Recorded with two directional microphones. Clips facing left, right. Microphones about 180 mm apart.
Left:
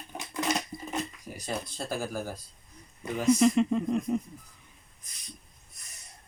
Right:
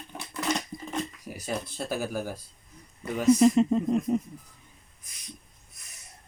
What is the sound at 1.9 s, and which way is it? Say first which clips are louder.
Speech: right 2 dB; 10° right (ahead or behind).